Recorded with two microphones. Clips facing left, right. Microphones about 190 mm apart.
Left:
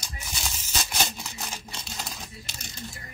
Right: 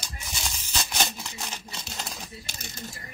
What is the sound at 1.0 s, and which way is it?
Crumpling, centre (ahead or behind).